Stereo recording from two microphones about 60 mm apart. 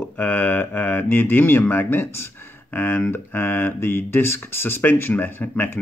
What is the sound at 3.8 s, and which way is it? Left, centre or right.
Speech, left.